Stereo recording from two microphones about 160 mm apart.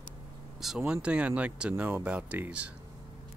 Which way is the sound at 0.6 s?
5° right (ahead or behind).